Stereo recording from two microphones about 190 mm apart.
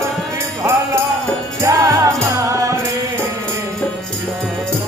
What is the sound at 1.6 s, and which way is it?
Music, 15° right (ahead or behind).